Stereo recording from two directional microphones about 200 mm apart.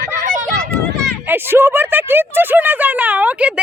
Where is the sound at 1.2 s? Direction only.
10° right (ahead or behind).